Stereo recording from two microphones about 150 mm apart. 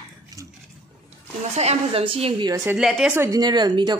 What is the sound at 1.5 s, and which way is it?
Speech, 45° right (ahead or behind).